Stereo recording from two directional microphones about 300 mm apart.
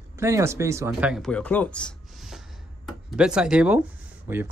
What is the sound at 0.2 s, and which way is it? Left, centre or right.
Speech, centre.